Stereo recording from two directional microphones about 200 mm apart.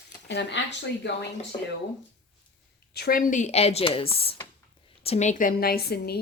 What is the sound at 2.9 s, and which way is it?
A woman's voice, 50° left (ahead or behind).